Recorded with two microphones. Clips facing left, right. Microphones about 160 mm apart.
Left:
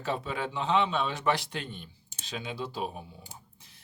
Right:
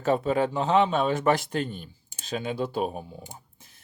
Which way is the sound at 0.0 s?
45° right (ahead or behind).